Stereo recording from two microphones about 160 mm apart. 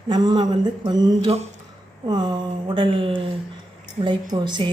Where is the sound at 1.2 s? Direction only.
40° right (ahead or behind).